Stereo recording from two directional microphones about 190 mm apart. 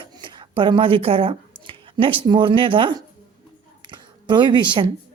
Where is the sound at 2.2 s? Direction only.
25° right (ahead or behind).